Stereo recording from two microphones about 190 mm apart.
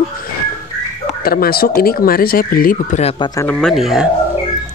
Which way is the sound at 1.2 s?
50° left (ahead or behind).